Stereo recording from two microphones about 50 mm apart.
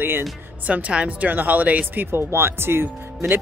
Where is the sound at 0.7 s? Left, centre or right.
Right.